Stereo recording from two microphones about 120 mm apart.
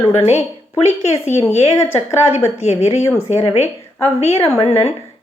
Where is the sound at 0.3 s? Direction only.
65° left (ahead or behind).